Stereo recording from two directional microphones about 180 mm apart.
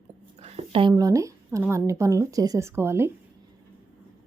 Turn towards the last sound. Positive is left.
turn(degrees=-15)  # may be behind; listen again after turning